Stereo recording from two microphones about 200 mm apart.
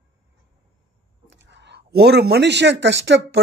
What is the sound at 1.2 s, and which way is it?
Speech, 60° right (ahead or behind).